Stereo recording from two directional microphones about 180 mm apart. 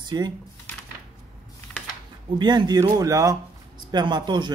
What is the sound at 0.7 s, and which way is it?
Typewriter, 10° left (ahead or behind).